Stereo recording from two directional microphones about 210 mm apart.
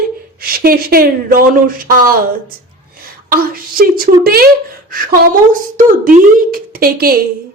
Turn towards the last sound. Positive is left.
turn(degrees=-45)  # may be behind; listen again after turning